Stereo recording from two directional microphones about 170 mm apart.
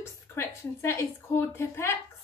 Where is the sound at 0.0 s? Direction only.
15° left (ahead or behind).